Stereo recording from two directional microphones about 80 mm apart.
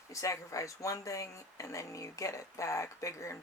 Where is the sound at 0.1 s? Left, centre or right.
Left.